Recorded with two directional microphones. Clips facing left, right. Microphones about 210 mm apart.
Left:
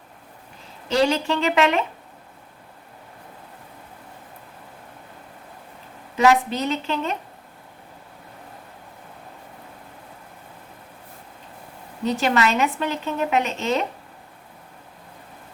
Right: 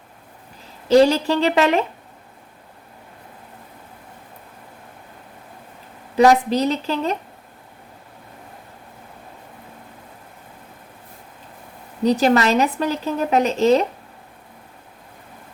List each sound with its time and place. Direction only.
0.9 s speech: 35° right (ahead or behind)
6.1 s speech: 35° right (ahead or behind)
12.0 s speech: 35° right (ahead or behind)